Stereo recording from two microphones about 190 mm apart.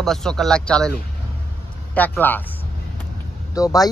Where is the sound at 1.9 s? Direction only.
10° left (ahead or behind).